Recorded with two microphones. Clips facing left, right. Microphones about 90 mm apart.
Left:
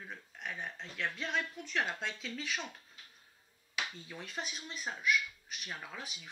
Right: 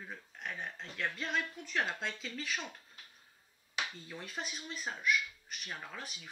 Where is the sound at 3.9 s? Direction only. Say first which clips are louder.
Even; centre (ahead or behind).